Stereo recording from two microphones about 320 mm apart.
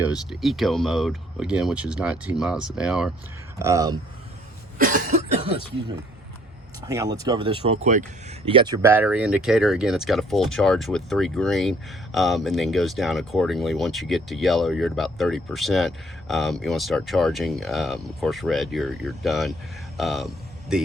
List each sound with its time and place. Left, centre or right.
0.0 s speech: centre
4.8 s cough: right
6.8 s speech: centre